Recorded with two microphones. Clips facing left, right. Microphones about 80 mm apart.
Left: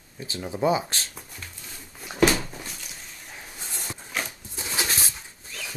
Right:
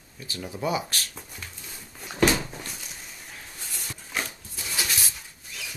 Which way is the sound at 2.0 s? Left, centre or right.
Centre.